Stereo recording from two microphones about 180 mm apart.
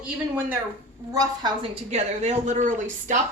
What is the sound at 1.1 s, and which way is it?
Speech, 20° right (ahead or behind).